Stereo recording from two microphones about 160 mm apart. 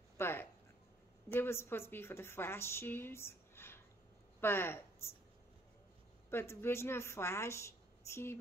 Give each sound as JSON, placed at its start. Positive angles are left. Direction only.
{"t": 0.2, "sound": "a woman's voice", "side_deg": 15}
{"t": 6.3, "sound": "a woman's voice", "side_deg": 15}